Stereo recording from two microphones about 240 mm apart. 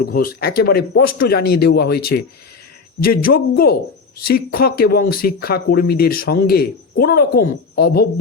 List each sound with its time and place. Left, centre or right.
0.0 s speech: left